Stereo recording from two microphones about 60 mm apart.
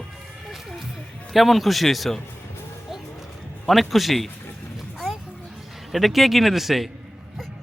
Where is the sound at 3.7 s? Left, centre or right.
Centre.